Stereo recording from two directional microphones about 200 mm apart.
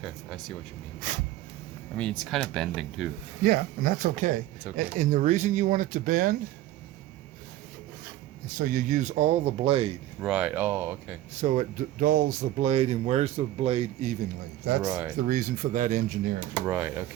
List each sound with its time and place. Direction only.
0.0 s speech: centre (ahead or behind)
2.0 s speech: 5° left (ahead or behind)
3.4 s speech: 45° right (ahead or behind)
8.4 s speech: 45° right (ahead or behind); by 10.0 s 30° right (ahead or behind)
10.2 s speech: 5° right (ahead or behind)
11.3 s speech: 40° right (ahead or behind)
14.8 s speech: 10° right (ahead or behind)
15.3 s speech: 40° right (ahead or behind)
16.6 s speech: 10° right (ahead or behind)